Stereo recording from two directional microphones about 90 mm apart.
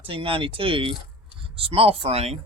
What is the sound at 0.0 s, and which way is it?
Speech, 90° right.